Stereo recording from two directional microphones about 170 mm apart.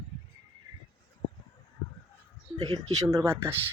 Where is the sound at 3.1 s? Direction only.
15° right (ahead or behind).